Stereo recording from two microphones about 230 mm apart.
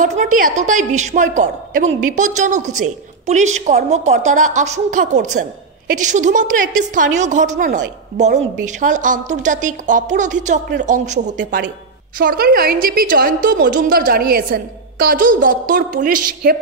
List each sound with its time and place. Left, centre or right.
0.0 s a woman's voice: right